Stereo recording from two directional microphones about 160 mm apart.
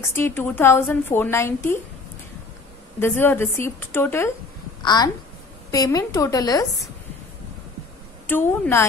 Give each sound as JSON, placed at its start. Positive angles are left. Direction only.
{"t": 0.1, "sound": "a woman's voice", "side_deg": 15}
{"t": 3.0, "sound": "a woman's voice", "side_deg": 15}
{"t": 4.8, "sound": "a woman's voice", "side_deg": 25}
{"t": 8.3, "sound": "a woman's voice", "side_deg": 15}